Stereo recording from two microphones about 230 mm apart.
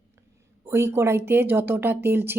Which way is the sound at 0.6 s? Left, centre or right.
Centre.